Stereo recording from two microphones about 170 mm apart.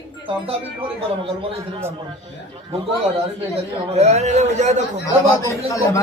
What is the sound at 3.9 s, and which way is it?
Speech, 40° right (ahead or behind).